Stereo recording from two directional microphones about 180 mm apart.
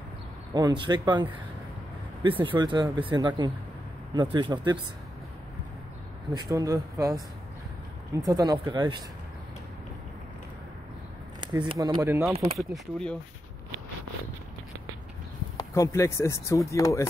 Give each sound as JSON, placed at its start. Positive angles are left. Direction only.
{"t": 0.6, "sound": "speech", "side_deg": -25}
{"t": 6.3, "sound": "speech", "side_deg": -20}
{"t": 8.3, "sound": "speech", "side_deg": -20}
{"t": 11.4, "sound": "speech", "side_deg": -25}
{"t": 12.5, "sound": "speech", "side_deg": 0}
{"t": 15.5, "sound": "speech", "side_deg": 15}